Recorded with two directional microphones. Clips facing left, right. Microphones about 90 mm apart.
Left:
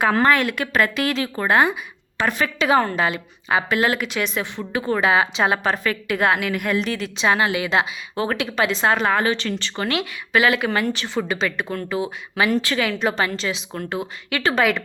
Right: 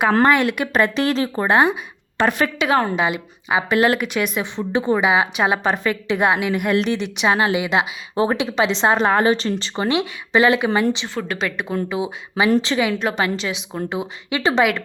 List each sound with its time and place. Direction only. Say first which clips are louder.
0.3 s speech: right 2 dB; 20° right (ahead or behind)
2.6 s a woman's voice: left 4 dB; centre (ahead or behind)
3.0 s a woman's voice: right 1 dB; 15° right (ahead or behind); by 9.7 s 35° right (ahead or behind)
9.7 s speech: right 5 dB; 25° right (ahead or behind)
11.1 s a woman's voice: left 2 dB; 5° left (ahead or behind)
11.3 s a woman's voice: right 1 dB; 5° right (ahead or behind)
13.0 s a woman's voice: even; centre (ahead or behind)
13.2 s a woman's voice: right 2 dB; 15° right (ahead or behind)
14.3 s speech: right 2 dB; 25° right (ahead or behind)